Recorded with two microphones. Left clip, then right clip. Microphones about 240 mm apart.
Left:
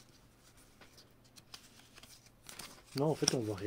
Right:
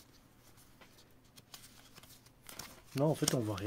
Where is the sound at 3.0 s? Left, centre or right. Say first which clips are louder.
Even; right.